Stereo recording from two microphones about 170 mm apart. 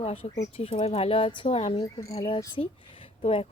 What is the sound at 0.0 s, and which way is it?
Speech, 35° left (ahead or behind).